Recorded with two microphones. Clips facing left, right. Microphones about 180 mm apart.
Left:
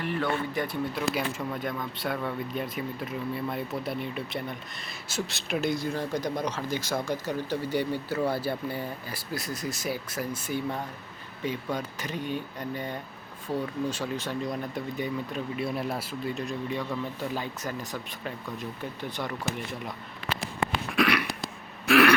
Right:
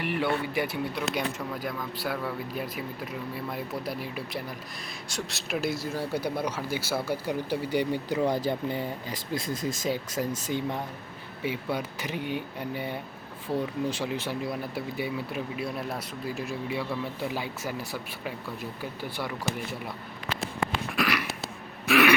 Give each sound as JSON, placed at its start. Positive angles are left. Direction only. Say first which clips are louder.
{"t": 0.2, "sound": "speech", "louder": "right 2 dB", "side_deg": -5}
{"t": 15.5, "sound": "speech", "louder": "left 2 dB", "side_deg": 0}
{"t": 20.9, "sound": "throat clearing", "louder": "left 3 dB", "side_deg": 0}